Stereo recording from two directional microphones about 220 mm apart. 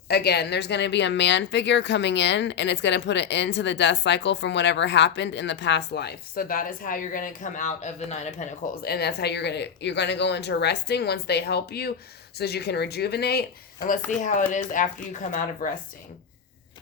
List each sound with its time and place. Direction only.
0.1 s speech: 45° left (ahead or behind); by 8.4 s 30° left (ahead or behind)
8.8 s speech: 45° left (ahead or behind)
14.3 s speech: 35° left (ahead or behind)